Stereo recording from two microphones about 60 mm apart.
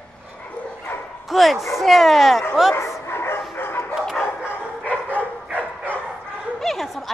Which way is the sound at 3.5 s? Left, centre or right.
Left.